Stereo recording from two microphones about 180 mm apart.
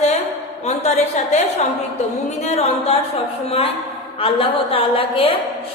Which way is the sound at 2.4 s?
35° left (ahead or behind).